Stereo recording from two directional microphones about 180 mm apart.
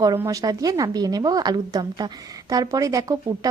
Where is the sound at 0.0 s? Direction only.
20° right (ahead or behind).